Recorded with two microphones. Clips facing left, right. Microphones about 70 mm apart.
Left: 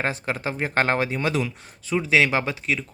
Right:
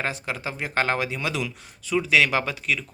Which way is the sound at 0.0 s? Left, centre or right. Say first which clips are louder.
Left 3 dB; left.